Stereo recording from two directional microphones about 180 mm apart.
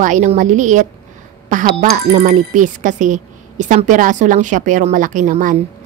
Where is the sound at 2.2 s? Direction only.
40° right (ahead or behind).